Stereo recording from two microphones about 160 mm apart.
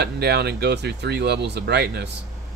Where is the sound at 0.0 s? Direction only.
90° right.